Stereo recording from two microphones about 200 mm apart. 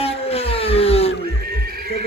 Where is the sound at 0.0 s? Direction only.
30° left (ahead or behind).